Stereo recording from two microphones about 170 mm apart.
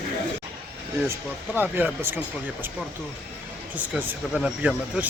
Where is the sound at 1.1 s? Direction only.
10° right (ahead or behind).